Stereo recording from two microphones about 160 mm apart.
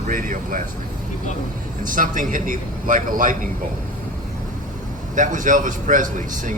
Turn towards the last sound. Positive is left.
turn(degrees=-55)  # may be behind; listen again after turning